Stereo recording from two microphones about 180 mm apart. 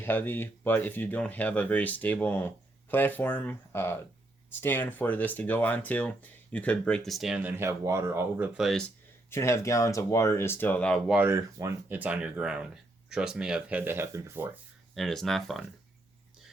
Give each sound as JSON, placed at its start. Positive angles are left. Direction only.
{"t": 0.0, "sound": "speech", "side_deg": 10}
{"t": 9.3, "sound": "speech", "side_deg": 15}
{"t": 11.1, "sound": "speech", "side_deg": -15}
{"t": 14.9, "sound": "speech", "side_deg": 0}